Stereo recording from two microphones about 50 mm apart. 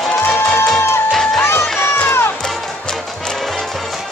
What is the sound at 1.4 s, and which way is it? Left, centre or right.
Run, left.